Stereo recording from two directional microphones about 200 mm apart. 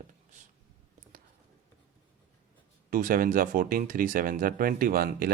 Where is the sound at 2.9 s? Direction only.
45° right (ahead or behind).